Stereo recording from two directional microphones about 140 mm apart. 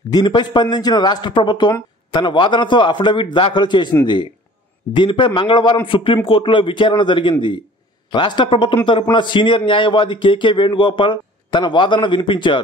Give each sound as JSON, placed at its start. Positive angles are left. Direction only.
{"t": 0.1, "sound": "a man's voice", "side_deg": 30}